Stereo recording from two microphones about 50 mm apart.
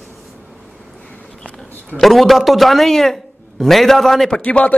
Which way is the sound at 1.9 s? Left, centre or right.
Centre.